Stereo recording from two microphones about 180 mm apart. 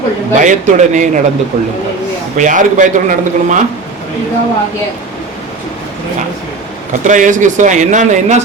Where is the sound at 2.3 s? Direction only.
45° right (ahead or behind).